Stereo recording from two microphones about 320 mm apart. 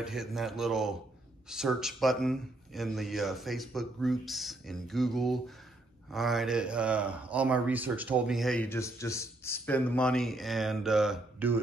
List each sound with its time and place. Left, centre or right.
0.0 s speech: centre